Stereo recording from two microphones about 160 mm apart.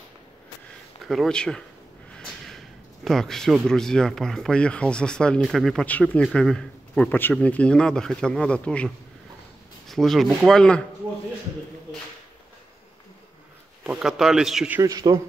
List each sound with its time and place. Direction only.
1.0 s speech: centre (ahead or behind)
13.8 s speech: 5° right (ahead or behind)
14.8 s a man's voice: 20° right (ahead or behind)